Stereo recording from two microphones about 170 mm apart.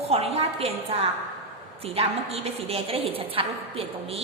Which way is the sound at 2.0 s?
35° right (ahead or behind).